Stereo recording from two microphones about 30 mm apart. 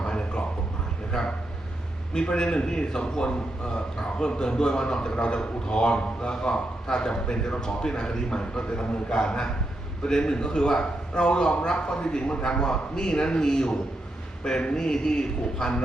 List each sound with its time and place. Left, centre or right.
0.0 s a sound: left
2.2 s a man's voice: left
6.3 s a man's voice: centre
7.1 s a man's voice: left